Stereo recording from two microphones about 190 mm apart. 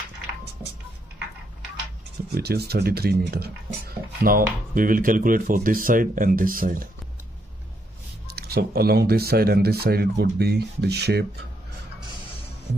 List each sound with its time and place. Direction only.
2.3 s speech: 55° right (ahead or behind)
8.3 s speech: 55° right (ahead or behind)